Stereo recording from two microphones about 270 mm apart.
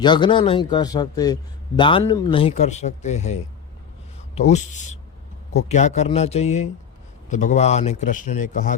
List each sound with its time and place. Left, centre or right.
0.0 s a man's voice: centre